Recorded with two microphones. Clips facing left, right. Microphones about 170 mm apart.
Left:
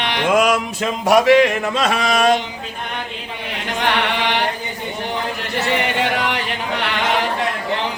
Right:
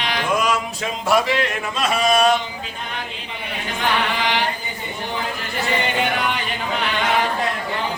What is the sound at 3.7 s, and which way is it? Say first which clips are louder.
Chant: left 2 dB; 65° left (ahead or behind).